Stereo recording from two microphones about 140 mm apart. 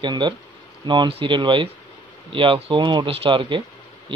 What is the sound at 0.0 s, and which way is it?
Speech, 30° right (ahead or behind).